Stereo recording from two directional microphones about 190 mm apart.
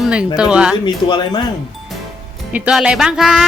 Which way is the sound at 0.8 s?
25° left (ahead or behind).